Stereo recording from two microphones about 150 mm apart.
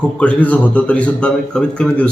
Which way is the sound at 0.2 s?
10° left (ahead or behind).